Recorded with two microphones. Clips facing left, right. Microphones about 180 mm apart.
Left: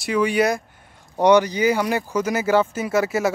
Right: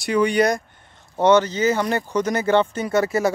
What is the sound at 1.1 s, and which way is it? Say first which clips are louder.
Speech: left 1 dB; 15° left (ahead or behind).